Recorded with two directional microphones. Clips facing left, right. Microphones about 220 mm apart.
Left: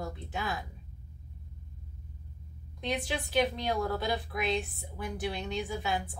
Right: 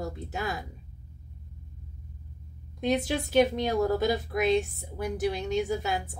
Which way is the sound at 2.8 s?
40° right (ahead or behind).